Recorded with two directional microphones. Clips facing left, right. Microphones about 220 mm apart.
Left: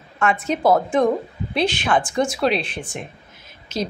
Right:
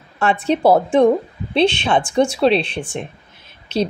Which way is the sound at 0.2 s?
30° right (ahead or behind).